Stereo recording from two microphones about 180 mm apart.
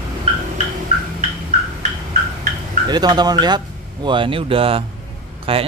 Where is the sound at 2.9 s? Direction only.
25° right (ahead or behind).